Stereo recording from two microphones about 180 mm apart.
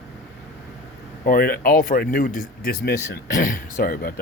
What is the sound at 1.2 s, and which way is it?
A man's voice, 55° left (ahead or behind).